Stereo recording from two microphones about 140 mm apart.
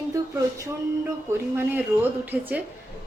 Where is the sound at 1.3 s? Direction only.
20° right (ahead or behind).